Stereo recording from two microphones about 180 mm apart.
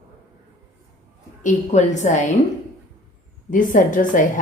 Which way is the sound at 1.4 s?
40° left (ahead or behind).